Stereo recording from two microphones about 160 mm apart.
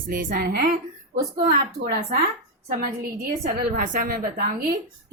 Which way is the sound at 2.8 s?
65° right (ahead or behind).